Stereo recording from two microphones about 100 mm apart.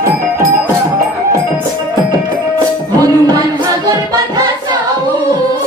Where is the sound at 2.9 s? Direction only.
40° right (ahead or behind).